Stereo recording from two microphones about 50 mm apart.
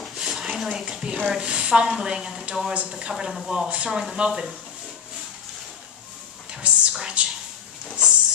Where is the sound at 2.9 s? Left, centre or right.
Centre.